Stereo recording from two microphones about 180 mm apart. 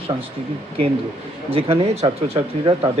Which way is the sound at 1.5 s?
30° right (ahead or behind).